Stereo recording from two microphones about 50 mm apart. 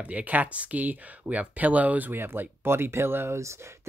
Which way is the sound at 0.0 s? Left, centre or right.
Right.